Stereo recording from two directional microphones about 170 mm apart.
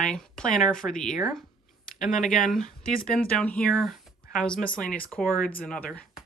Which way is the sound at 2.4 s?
5° left (ahead or behind).